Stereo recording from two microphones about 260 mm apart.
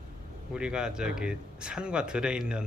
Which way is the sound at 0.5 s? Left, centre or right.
Centre.